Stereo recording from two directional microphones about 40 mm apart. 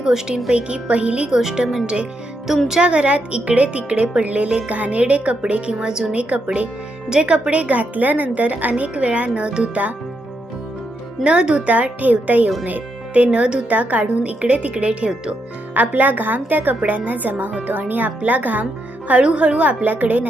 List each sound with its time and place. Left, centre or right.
0.0 s speech: centre
1.4 s speech: centre
2.8 s speech: right
6.1 s speech: right
11.2 s speech: right
11.7 s speech: right
12.6 s music: right
13.2 s speech: right
13.7 s speech: right
15.7 s a woman's voice: right